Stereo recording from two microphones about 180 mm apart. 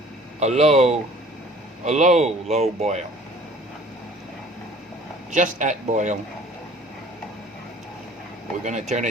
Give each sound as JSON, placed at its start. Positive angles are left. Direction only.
{"t": 0.3, "sound": "speech", "side_deg": -35}
{"t": 5.3, "sound": "speech", "side_deg": -45}
{"t": 8.6, "sound": "speech", "side_deg": -40}